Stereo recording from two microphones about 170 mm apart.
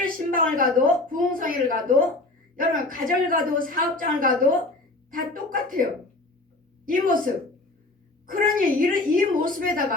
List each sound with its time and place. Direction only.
0.0 s a woman's voice: 55° right (ahead or behind)
8.3 s a woman's voice: 55° right (ahead or behind)